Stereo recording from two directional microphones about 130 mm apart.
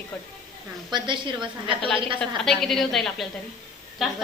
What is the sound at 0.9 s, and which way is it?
Speech, 35° right (ahead or behind).